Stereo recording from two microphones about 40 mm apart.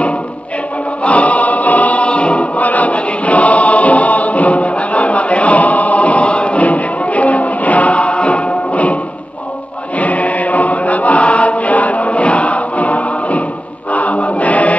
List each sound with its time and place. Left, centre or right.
1.0 s choir: left
9.9 s chant: left